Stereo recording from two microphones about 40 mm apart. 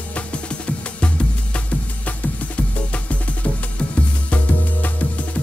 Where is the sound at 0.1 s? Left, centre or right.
Left.